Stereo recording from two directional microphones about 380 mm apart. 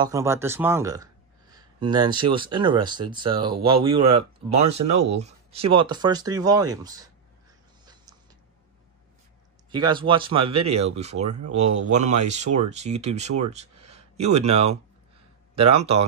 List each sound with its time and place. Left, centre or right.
0.0 s speech: centre
7.8 s a sound: centre
9.7 s speech: centre